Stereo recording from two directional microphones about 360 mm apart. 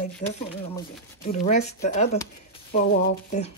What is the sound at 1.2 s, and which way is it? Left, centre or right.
Speech, centre.